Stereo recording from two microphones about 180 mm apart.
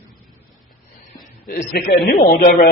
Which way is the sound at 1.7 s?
70° left (ahead or behind).